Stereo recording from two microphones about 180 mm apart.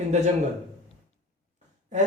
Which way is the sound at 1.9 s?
40° right (ahead or behind).